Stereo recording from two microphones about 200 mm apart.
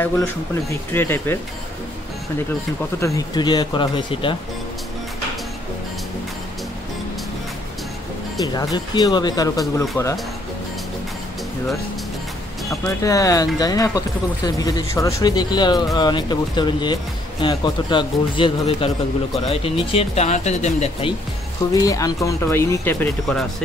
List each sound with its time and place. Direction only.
0.7 s speech: 10° left (ahead or behind)
3.0 s speech: 15° left (ahead or behind)
8.7 s speech: 20° left (ahead or behind)
12.8 s speech: 15° left (ahead or behind); by 21.1 s 35° left (ahead or behind)
21.7 s speech: 15° left (ahead or behind)